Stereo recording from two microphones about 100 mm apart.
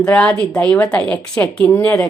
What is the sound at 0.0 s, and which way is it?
A woman's voice, 15° left (ahead or behind).